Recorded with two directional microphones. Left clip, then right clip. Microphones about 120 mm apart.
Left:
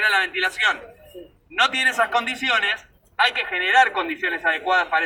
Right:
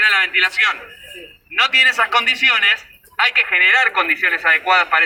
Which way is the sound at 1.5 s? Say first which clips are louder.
Right 6 dB; 10° left (ahead or behind).